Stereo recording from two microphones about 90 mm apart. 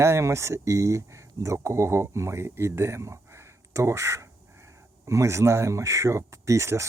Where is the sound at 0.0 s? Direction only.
30° right (ahead or behind).